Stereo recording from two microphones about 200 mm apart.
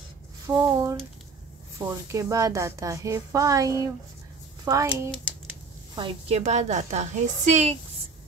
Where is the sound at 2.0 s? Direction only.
15° right (ahead or behind).